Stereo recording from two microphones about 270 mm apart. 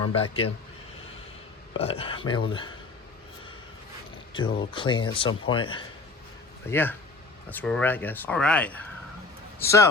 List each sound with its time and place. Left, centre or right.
0.1 s speech: left
1.8 s speech: left
4.4 s speech: centre
6.7 s speech: centre